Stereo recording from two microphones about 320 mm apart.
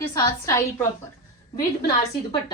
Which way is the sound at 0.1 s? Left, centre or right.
Centre.